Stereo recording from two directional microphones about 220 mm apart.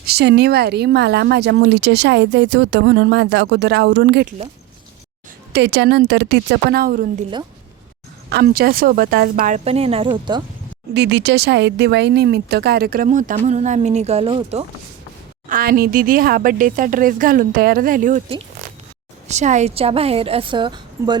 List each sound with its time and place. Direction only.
0.0 s speech: 45° right (ahead or behind)
5.5 s speech: 50° right (ahead or behind)
8.4 s speech: 40° right (ahead or behind)
9.6 s a woman's voice: 25° right (ahead or behind)
10.9 s speech: 50° right (ahead or behind); by 14.6 s 25° right (ahead or behind)
15.4 s speech: 40° right (ahead or behind)
19.3 s a woman's voice: 30° right (ahead or behind)